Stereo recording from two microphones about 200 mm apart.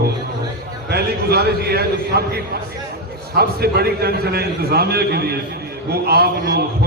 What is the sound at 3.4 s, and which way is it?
A man's voice, 50° right (ahead or behind).